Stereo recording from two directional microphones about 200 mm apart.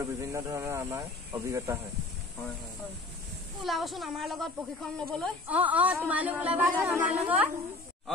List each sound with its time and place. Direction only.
0.0 s speech: 15° right (ahead or behind)
3.6 s speech: centre (ahead or behind)